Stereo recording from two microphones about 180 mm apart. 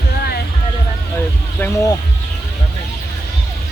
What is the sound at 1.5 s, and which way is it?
Speech, 15° left (ahead or behind).